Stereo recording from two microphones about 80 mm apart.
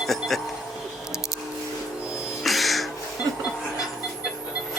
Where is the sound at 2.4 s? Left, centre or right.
Centre.